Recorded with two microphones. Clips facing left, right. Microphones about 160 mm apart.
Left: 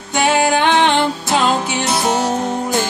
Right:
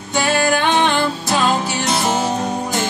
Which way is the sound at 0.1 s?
20° left (ahead or behind).